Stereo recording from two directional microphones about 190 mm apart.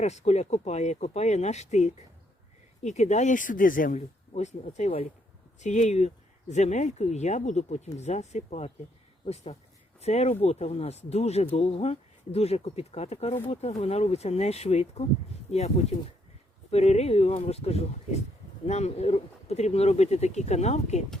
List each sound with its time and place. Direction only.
0.0 s speech: 35° left (ahead or behind)